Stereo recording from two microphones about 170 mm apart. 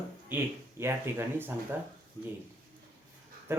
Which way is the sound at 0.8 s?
15° right (ahead or behind).